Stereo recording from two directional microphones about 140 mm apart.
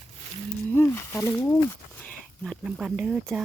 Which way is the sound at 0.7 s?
15° left (ahead or behind).